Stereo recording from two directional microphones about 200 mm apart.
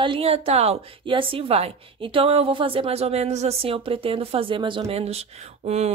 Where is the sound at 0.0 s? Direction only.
25° right (ahead or behind).